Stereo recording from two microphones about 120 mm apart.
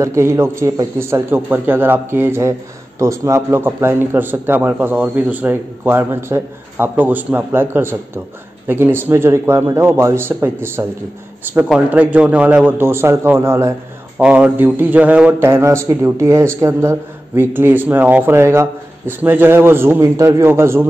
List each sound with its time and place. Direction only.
0.0 s a man's voice: 25° right (ahead or behind)
14.1 s a man's voice: 10° right (ahead or behind)
15.4 s a man's voice: 20° right (ahead or behind)